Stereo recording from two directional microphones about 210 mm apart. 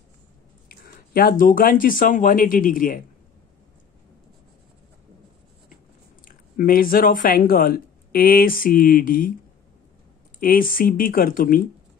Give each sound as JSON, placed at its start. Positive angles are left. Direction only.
{"t": 0.7, "sound": "speech", "side_deg": 45}
{"t": 6.2, "sound": "speech", "side_deg": 40}
{"t": 10.4, "sound": "speech", "side_deg": 45}